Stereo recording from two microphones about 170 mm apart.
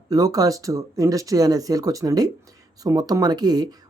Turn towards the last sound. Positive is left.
turn(degrees=-25)  # may be behind; listen again after turning